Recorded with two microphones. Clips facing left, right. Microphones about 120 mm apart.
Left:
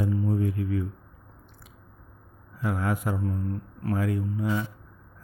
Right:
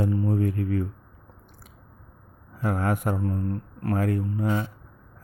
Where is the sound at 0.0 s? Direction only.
60° right (ahead or behind).